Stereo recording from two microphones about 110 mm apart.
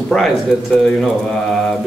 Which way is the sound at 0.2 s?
Centre (ahead or behind).